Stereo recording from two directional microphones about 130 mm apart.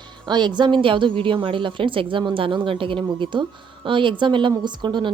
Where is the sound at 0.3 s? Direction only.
35° right (ahead or behind).